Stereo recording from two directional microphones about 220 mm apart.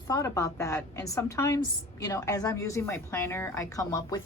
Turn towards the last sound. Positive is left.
turn(degrees=15)  # may be behind; listen again after turning